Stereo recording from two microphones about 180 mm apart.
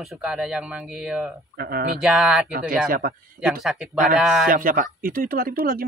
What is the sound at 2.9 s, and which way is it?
Speech, 55° right (ahead or behind).